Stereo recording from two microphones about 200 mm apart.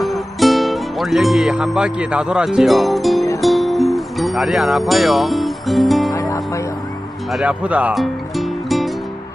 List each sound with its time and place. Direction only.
0.0 s music: centre (ahead or behind)
6.1 s music: 15° left (ahead or behind)
7.3 s music: 5° right (ahead or behind)